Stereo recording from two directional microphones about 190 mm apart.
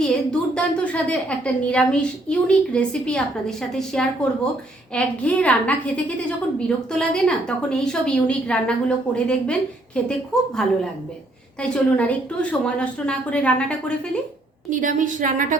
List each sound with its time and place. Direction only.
0.0 s a woman's voice: 5° left (ahead or behind)
11.6 s a woman's voice: 5° left (ahead or behind)
14.7 s a woman's voice: 45° right (ahead or behind)